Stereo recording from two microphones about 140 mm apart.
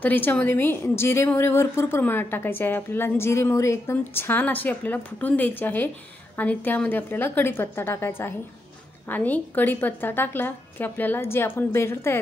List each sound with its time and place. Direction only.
0.0 s a woman's voice: 15° left (ahead or behind)